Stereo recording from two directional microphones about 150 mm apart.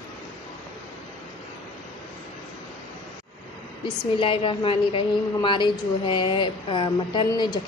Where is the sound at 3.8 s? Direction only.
35° left (ahead or behind).